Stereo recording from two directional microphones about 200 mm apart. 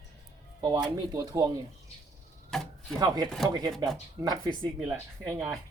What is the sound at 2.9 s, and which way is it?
Speech, 20° right (ahead or behind).